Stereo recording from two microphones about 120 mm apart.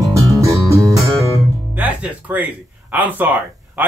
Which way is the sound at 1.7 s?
15° right (ahead or behind).